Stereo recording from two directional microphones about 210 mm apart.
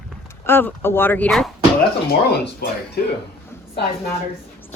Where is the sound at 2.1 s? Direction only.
50° left (ahead or behind).